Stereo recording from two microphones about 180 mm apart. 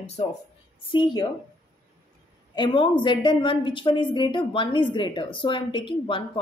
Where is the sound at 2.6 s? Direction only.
25° left (ahead or behind).